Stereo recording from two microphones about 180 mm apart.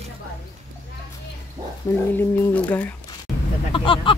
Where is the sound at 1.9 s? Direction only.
20° left (ahead or behind).